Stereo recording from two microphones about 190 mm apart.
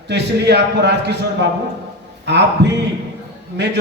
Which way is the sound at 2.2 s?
65° right (ahead or behind).